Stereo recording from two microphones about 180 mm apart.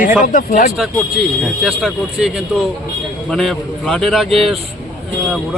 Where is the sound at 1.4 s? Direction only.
Centre (ahead or behind).